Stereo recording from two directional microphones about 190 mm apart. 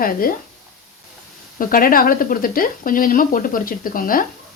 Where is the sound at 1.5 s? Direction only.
45° left (ahead or behind).